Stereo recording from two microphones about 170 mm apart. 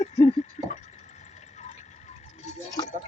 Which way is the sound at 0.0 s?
40° left (ahead or behind).